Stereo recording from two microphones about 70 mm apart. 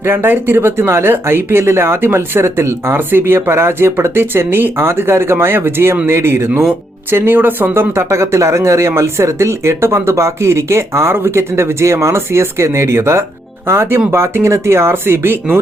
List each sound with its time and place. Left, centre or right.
0.0 s speech: right